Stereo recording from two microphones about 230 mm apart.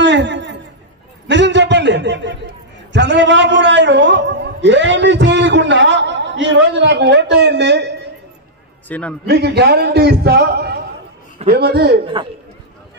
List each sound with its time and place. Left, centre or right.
0.0 s a sound: right
2.9 s a man's voice: right
8.8 s a man's voice: centre
9.3 s a man's voice: right